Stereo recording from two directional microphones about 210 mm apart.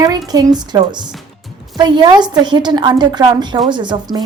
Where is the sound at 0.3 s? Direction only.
20° right (ahead or behind).